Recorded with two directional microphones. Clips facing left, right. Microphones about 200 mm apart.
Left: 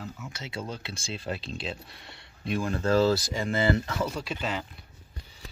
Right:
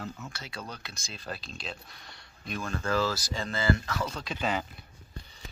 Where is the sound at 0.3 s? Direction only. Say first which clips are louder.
Left 5 dB; 25° left (ahead or behind).